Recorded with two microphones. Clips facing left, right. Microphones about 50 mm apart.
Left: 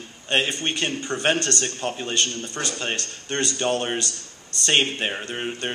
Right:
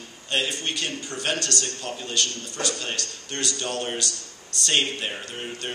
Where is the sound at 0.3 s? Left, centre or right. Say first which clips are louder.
Left 3 dB; left.